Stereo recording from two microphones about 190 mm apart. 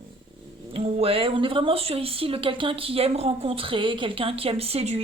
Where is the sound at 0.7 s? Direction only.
30° right (ahead or behind).